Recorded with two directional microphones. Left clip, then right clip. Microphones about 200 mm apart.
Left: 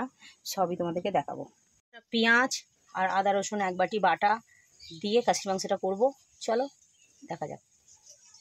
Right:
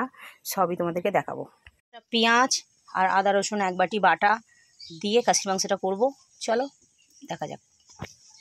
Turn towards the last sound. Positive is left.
turn(degrees=-10)  # may be behind; listen again after turning